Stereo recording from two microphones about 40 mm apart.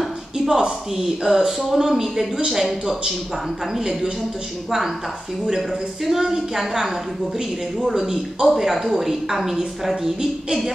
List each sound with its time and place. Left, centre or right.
0.5 s speech: centre
6.0 s speech: centre